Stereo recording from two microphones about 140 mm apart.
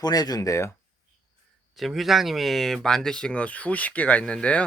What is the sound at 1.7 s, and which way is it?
Speech, centre (ahead or behind).